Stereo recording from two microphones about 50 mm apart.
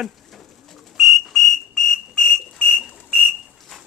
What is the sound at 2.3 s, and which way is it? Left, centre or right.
Whistle, right.